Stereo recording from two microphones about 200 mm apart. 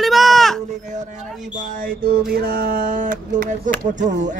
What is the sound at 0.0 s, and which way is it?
Sheep, centre (ahead or behind).